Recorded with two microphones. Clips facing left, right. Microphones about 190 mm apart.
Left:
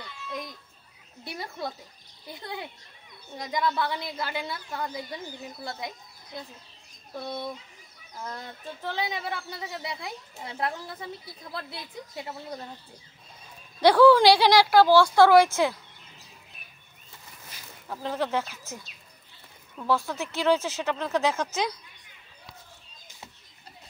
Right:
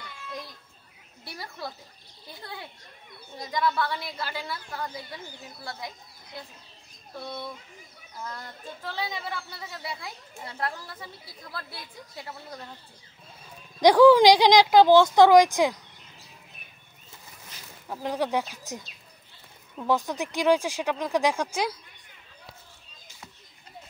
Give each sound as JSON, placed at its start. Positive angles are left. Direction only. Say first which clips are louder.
{"t": 1.2, "sound": "a woman's voice", "louder": "left 3 dB", "side_deg": 20}
{"t": 8.8, "sound": "a woman's voice", "louder": "left 3 dB", "side_deg": 20}
{"t": 13.7, "sound": "speech", "louder": "right 2 dB", "side_deg": -15}
{"t": 17.8, "sound": "speech", "louder": "right 1 dB", "side_deg": -15}
{"t": 19.8, "sound": "speech", "louder": "right 1 dB", "side_deg": -15}